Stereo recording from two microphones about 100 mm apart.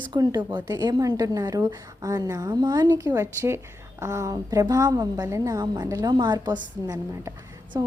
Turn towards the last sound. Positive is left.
turn(degrees=-35)  # may be behind; listen again after turning